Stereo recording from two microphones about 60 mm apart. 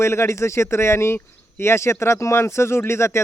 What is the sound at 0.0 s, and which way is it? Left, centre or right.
Speech, left.